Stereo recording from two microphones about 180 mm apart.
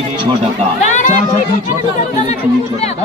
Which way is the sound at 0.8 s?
40° left (ahead or behind).